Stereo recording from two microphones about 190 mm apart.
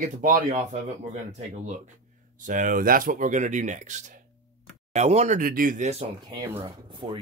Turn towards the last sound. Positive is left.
turn(degrees=-20)  # may be behind; listen again after turning